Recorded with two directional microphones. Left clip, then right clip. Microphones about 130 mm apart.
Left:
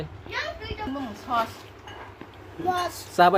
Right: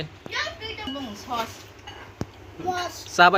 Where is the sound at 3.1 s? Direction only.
20° left (ahead or behind).